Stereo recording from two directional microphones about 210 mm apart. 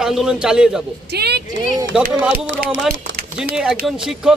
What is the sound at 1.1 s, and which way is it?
Speech, 50° right (ahead or behind).